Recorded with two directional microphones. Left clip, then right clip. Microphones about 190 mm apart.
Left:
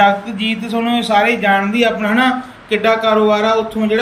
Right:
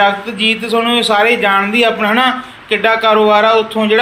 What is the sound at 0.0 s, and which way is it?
A man's voice, 10° left (ahead or behind).